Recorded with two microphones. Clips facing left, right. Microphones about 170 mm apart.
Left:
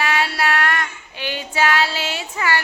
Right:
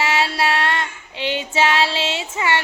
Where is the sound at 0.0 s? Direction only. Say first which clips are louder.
Right 1 dB; 25° right (ahead or behind).